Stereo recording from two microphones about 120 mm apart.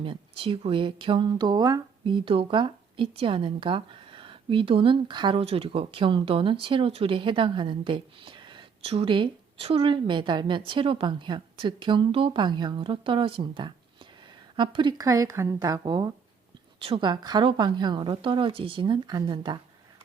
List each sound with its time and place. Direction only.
0.0 s a woman's voice: 45° right (ahead or behind)
14.9 s a woman's voice: 30° right (ahead or behind)